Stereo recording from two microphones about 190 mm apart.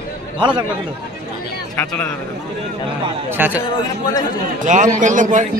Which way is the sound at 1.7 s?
10° left (ahead or behind).